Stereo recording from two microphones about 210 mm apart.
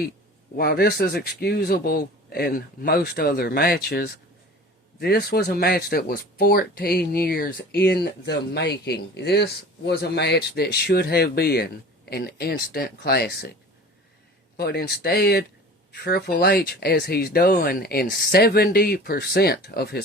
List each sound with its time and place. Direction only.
0.5 s speech: 50° left (ahead or behind)